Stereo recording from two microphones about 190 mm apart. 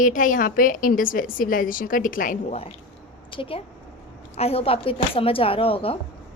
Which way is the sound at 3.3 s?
30° left (ahead or behind).